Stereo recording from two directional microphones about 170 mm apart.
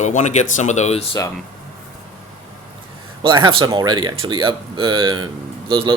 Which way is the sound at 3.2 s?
25° right (ahead or behind).